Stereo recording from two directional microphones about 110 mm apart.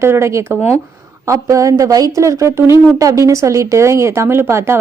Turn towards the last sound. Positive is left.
turn(degrees=-25)  # may be behind; listen again after turning